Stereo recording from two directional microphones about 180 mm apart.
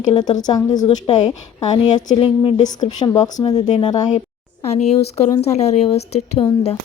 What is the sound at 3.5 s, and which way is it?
Speech, 35° left (ahead or behind).